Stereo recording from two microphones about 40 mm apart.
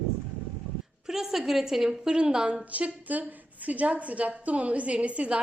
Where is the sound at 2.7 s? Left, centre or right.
Right.